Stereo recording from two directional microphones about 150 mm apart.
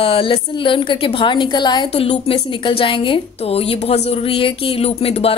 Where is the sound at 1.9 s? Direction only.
40° left (ahead or behind).